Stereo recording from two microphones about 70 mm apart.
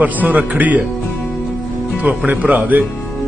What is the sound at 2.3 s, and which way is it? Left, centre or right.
Speech, right.